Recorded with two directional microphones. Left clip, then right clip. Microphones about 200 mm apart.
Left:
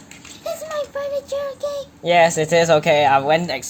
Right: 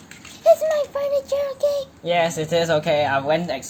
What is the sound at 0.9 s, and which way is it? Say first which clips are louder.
Speech: right 2 dB; 20° right (ahead or behind).